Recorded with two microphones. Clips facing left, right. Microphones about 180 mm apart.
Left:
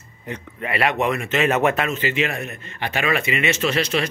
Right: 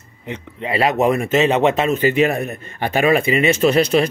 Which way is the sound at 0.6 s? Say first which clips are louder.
Right 5 dB; 30° right (ahead or behind).